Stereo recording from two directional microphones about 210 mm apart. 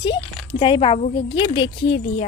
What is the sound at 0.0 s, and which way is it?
A woman's voice, 25° left (ahead or behind).